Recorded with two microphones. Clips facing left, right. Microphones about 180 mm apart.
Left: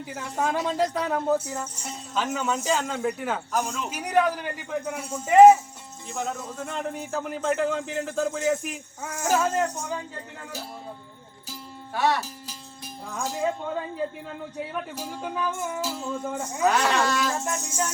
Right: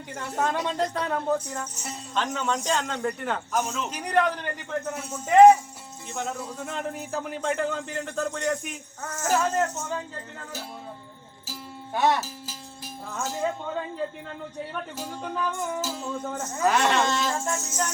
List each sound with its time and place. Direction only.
0.1 s speech: centre (ahead or behind)
11.9 s speech: 20° right (ahead or behind)
12.2 s a sound: centre (ahead or behind)
13.2 s speech: centre (ahead or behind)
17.0 s speech: 25° right (ahead or behind)
17.6 s speech: 10° left (ahead or behind)